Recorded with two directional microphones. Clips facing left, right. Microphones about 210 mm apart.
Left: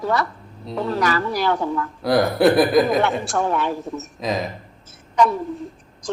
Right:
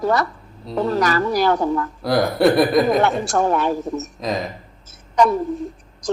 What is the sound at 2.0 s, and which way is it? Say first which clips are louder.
A man's voice: left 1 dB; centre (ahead or behind).